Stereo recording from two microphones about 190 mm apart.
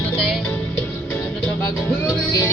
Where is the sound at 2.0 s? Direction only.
20° left (ahead or behind).